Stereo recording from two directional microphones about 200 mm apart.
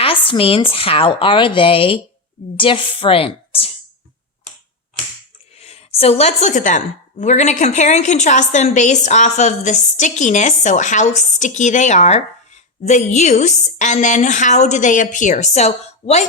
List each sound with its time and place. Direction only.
0.0 s a woman's voice: 25° left (ahead or behind)
5.5 s a woman's voice: 30° left (ahead or behind)